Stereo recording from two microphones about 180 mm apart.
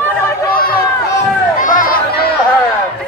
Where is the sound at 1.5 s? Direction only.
50° left (ahead or behind).